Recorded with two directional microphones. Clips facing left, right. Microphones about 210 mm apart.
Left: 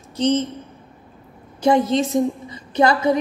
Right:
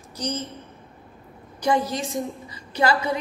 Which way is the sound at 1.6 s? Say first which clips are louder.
Left 6 dB; 25° left (ahead or behind).